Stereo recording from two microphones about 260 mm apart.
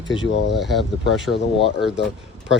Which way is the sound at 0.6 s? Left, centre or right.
Centre.